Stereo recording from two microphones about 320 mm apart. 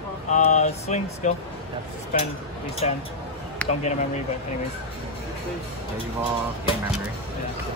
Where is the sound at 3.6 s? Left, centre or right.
Centre.